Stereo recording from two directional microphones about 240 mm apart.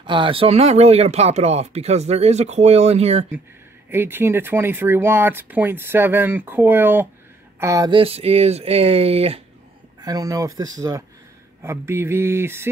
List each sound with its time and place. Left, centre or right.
0.0 s speech: centre
3.9 s speech: centre